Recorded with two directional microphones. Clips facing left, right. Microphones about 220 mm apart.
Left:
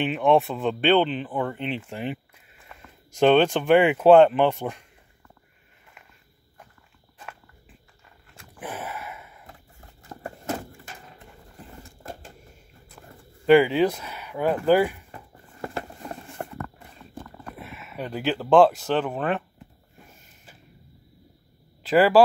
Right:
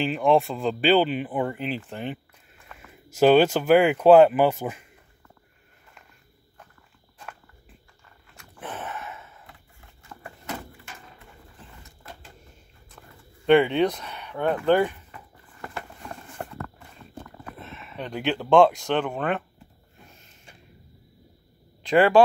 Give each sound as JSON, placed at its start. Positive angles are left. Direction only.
{"t": 0.0, "sound": "speech", "side_deg": 0}
{"t": 8.5, "sound": "gasp", "side_deg": 10}
{"t": 10.0, "sound": "a sound", "side_deg": 40}
{"t": 13.5, "sound": "speech", "side_deg": 5}
{"t": 15.0, "sound": "a sound", "side_deg": 30}
{"t": 17.6, "sound": "speech", "side_deg": 10}
{"t": 21.8, "sound": "speech", "side_deg": 5}